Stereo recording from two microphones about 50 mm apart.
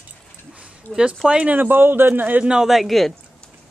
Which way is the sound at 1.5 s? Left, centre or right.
Right.